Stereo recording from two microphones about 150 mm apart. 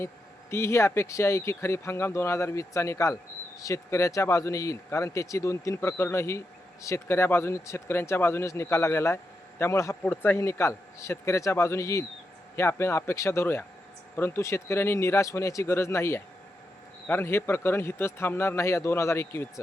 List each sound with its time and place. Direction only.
0.5 s speech: 15° left (ahead or behind)